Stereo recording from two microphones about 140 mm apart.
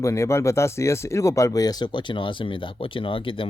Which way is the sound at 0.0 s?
20° left (ahead or behind).